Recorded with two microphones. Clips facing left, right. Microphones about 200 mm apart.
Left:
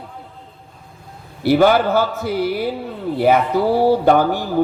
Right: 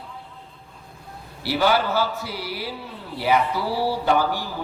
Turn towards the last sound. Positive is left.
turn(degrees=50)  # may be behind; listen again after turning